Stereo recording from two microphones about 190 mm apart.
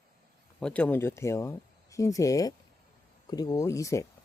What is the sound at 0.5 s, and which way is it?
Speech, 5° left (ahead or behind).